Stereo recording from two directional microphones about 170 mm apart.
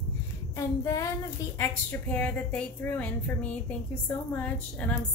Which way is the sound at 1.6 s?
10° left (ahead or behind).